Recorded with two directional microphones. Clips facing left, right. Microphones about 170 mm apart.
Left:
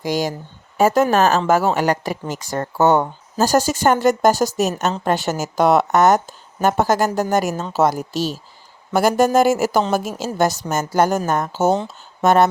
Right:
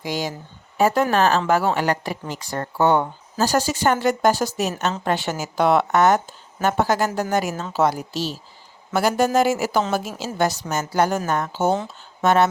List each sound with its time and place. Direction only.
0.0 s speech: 45° left (ahead or behind)